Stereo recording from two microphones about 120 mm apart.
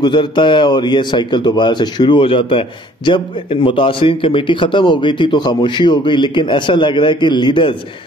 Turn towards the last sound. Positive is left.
turn(degrees=40)  # may be behind; listen again after turning